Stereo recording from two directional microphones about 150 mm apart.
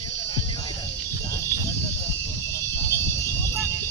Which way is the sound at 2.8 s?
15° left (ahead or behind).